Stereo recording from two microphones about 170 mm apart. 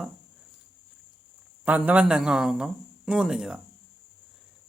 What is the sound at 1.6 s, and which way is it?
Speech, 10° right (ahead or behind).